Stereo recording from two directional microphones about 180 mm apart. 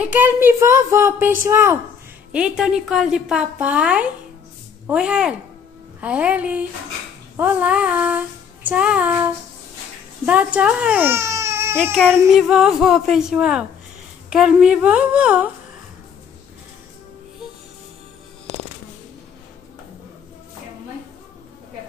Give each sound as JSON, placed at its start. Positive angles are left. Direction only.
{"t": 0.0, "sound": "speech", "side_deg": -10}
{"t": 11.9, "sound": "speech", "side_deg": 5}